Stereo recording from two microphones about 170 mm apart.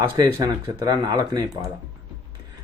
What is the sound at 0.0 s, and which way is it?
Speech, 20° right (ahead or behind).